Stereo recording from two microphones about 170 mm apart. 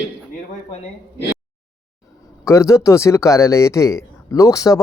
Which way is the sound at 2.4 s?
15° left (ahead or behind).